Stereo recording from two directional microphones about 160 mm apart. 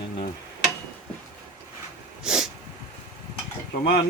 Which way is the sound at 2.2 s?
5° right (ahead or behind).